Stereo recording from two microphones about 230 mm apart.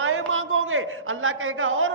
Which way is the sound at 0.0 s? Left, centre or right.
Right.